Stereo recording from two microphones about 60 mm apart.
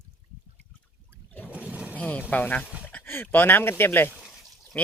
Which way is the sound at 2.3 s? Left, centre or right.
Left.